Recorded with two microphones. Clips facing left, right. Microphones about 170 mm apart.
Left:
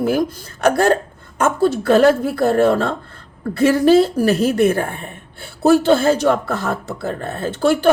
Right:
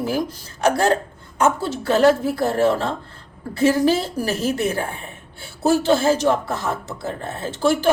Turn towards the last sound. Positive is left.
turn(degrees=60)  # may be behind; listen again after turning